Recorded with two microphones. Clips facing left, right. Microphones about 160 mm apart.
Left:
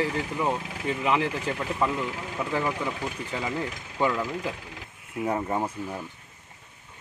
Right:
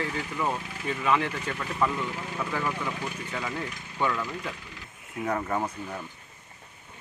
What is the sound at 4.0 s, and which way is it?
Speech, 30° left (ahead or behind).